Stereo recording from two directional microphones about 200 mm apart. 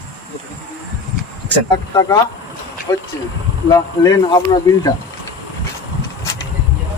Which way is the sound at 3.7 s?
20° left (ahead or behind).